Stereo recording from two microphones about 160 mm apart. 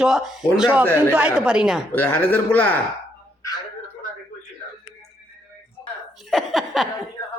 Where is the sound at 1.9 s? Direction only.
10° left (ahead or behind).